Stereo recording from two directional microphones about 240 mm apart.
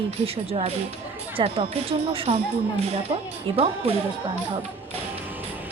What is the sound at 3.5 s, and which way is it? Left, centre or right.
Speech, right.